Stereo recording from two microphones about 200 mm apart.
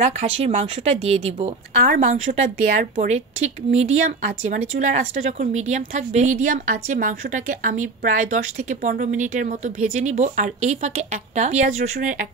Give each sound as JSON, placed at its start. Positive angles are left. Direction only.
{"t": 0.0, "sound": "a woman's voice", "side_deg": -40}